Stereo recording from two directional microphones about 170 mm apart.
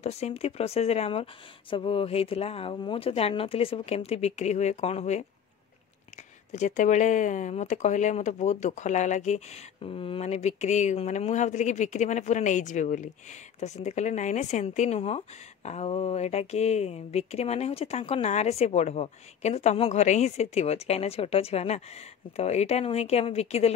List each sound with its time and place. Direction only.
0.0 s speech: 40° left (ahead or behind)
6.5 s speech: 45° left (ahead or behind)